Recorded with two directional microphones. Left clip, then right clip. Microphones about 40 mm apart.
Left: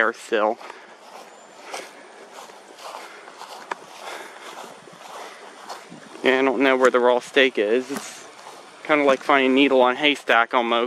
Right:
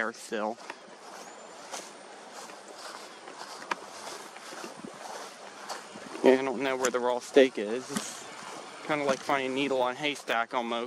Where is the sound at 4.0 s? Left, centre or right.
Left.